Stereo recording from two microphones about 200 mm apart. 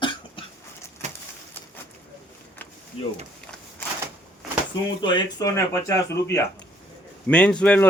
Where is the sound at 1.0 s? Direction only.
35° right (ahead or behind).